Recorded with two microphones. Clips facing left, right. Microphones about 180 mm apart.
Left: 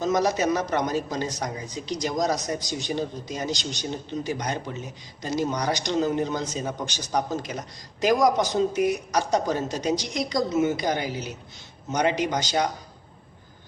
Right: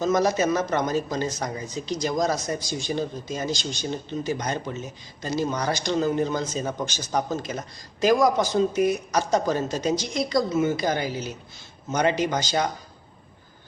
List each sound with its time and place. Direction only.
0.0 s speech: 15° left (ahead or behind)